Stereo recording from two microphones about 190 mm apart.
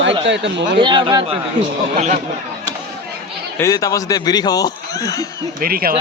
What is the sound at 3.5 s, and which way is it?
Speech, 15° left (ahead or behind).